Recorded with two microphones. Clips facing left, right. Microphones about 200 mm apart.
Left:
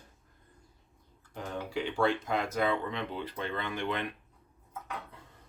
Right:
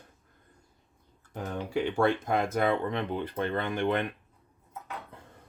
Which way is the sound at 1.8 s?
55° right (ahead or behind).